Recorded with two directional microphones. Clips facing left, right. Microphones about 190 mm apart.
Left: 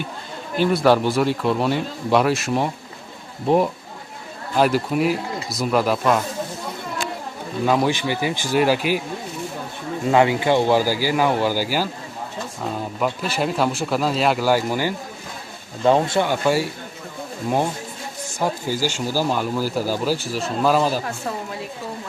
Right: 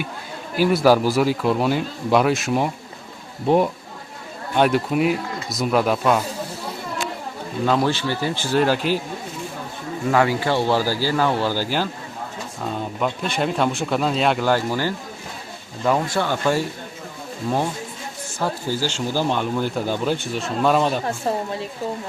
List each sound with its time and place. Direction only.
0.5 s speech: 5° right (ahead or behind)
7.6 s speech: 10° left (ahead or behind)
10.1 s speech: 20° left (ahead or behind)
13.0 s speech: 5° left (ahead or behind)
15.8 s speech: 25° left (ahead or behind)
16.2 s speech: 10° left (ahead or behind)
18.3 s speech: 15° left (ahead or behind)
21.0 s a woman's voice: 30° right (ahead or behind)